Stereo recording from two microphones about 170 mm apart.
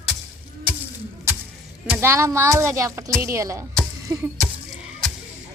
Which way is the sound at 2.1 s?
15° right (ahead or behind).